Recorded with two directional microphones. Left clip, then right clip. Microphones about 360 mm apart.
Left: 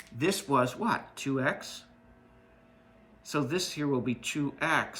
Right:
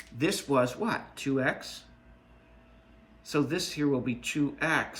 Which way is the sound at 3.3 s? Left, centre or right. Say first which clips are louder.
Right 1 dB; centre.